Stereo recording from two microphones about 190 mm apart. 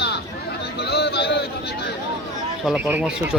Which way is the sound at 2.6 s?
5° right (ahead or behind).